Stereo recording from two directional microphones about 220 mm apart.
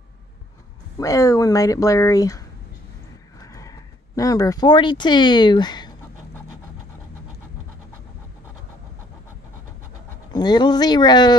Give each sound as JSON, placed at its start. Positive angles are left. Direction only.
{"t": 0.9, "sound": "speech", "side_deg": 15}
{"t": 10.3, "sound": "speech", "side_deg": 20}